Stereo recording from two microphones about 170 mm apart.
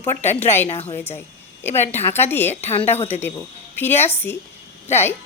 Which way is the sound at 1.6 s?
15° left (ahead or behind).